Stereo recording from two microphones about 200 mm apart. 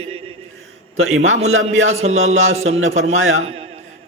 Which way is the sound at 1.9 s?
30° right (ahead or behind).